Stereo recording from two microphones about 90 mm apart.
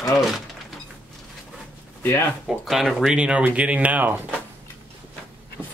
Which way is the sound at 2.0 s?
25° left (ahead or behind).